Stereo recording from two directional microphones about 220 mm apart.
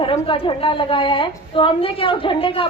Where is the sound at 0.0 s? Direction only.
25° left (ahead or behind).